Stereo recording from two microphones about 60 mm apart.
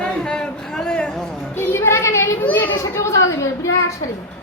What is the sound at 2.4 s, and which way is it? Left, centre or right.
Speech, left.